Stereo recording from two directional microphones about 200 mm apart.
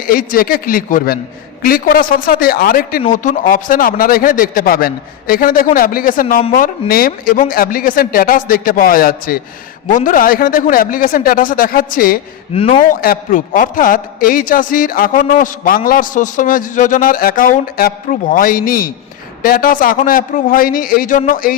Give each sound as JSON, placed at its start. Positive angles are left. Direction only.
{"t": 0.1, "sound": "a man's voice", "side_deg": 45}
{"t": 12.5, "sound": "a man's voice", "side_deg": 30}